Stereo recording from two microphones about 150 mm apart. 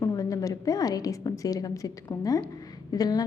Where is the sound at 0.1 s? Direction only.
20° left (ahead or behind).